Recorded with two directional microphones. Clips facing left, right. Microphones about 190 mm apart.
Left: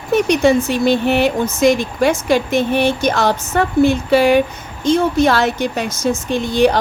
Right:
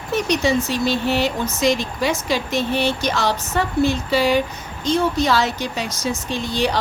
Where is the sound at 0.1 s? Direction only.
55° left (ahead or behind).